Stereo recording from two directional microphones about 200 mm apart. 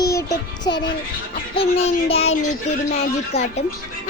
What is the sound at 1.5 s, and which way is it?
Speech, 30° left (ahead or behind).